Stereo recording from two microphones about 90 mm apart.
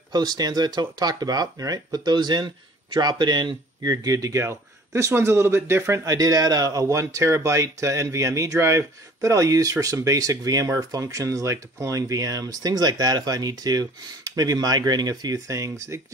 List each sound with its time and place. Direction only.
0.1 s speech: 50° right (ahead or behind)